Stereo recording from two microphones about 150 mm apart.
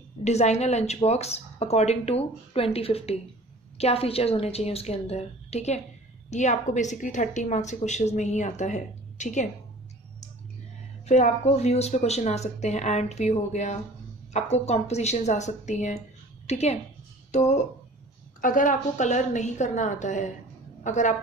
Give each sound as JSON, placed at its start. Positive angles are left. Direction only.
{"t": 0.2, "sound": "a woman's voice", "side_deg": 45}
{"t": 11.1, "sound": "a woman's voice", "side_deg": 50}
{"t": 18.4, "sound": "a woman's voice", "side_deg": 60}